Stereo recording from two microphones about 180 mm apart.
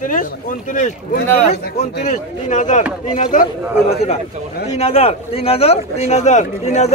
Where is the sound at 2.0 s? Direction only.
45° left (ahead or behind).